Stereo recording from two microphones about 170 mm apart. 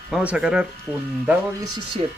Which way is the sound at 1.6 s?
25° right (ahead or behind).